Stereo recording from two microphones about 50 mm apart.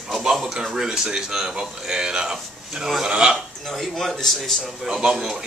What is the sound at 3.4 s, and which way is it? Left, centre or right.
Speech, centre.